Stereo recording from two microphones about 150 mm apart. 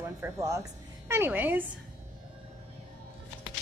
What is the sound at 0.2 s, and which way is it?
A woman's voice, 20° right (ahead or behind).